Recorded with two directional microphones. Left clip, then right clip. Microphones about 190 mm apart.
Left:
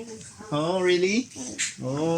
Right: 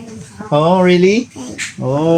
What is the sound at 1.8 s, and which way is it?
Speech, 20° right (ahead or behind).